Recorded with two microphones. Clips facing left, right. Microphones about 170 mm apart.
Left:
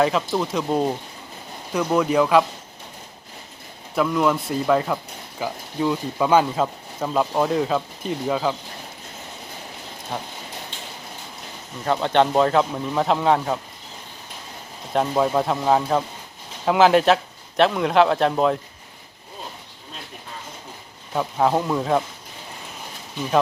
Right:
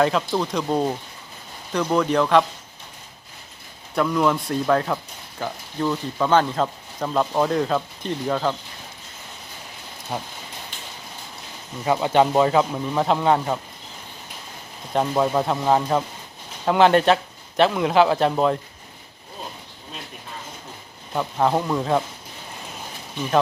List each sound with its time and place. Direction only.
0.0 s speech: centre (ahead or behind)
3.9 s speech: centre (ahead or behind)
10.1 s speech: 5° right (ahead or behind)
11.9 s speech: 5° right (ahead or behind)
14.9 s speech: centre (ahead or behind)
21.1 s speech: centre (ahead or behind)